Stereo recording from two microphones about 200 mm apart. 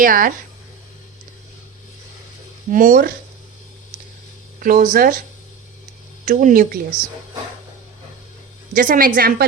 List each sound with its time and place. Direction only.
0.0 s a woman's voice: 45° right (ahead or behind)
2.7 s a woman's voice: 40° right (ahead or behind)
4.6 s a woman's voice: 40° right (ahead or behind)
6.2 s a woman's voice: 40° right (ahead or behind)
8.7 s a woman's voice: 45° right (ahead or behind)